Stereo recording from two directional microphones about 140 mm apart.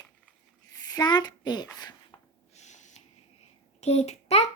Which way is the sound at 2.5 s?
55° left (ahead or behind).